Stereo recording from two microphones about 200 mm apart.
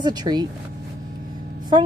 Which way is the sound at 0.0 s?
20° right (ahead or behind).